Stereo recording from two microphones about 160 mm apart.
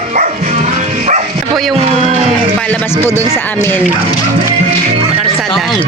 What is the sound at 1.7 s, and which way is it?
Music, 40° right (ahead or behind).